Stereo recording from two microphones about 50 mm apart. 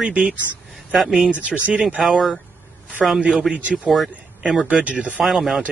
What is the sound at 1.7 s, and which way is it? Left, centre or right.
Speech, right.